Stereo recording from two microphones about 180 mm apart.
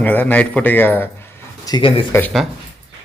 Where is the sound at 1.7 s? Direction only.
25° left (ahead or behind).